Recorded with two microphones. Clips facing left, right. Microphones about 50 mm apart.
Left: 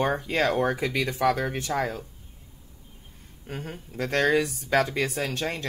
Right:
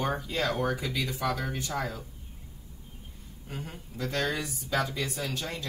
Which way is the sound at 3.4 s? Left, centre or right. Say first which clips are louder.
Left 4 dB; left.